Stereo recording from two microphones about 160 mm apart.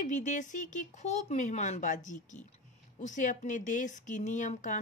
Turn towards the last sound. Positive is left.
turn(degrees=50)  # may be behind; listen again after turning